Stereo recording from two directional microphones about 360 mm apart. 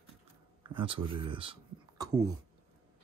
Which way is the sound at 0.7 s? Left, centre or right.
Centre.